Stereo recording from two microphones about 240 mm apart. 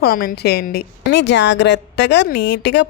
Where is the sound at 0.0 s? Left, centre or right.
Left.